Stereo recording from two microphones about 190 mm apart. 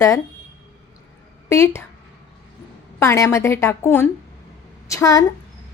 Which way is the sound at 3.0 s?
15° left (ahead or behind).